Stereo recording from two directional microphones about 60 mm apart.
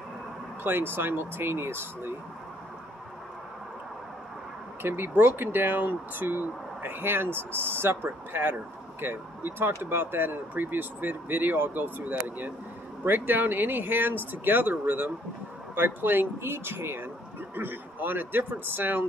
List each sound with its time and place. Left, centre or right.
0.7 s speech: right
4.8 s speech: right